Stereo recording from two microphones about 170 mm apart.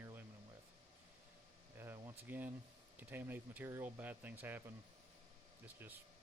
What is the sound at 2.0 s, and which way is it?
Speech, 10° right (ahead or behind).